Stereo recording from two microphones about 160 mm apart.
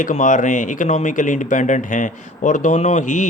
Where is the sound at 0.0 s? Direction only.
50° left (ahead or behind).